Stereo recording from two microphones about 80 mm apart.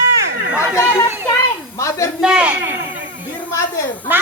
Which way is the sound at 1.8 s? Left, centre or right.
Left.